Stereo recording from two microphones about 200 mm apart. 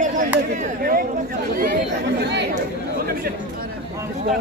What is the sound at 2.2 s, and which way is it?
Speech, 60° right (ahead or behind).